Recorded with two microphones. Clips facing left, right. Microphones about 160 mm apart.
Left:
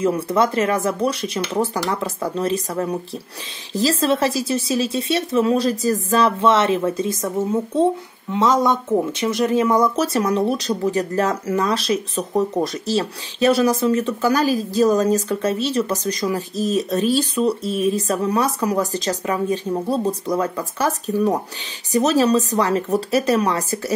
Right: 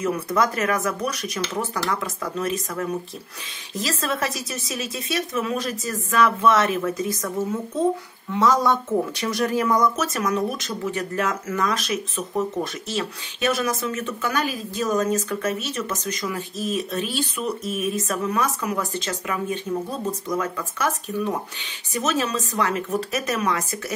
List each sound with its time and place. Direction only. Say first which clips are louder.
0.0 s speech: left 4 dB; 30° left (ahead or behind)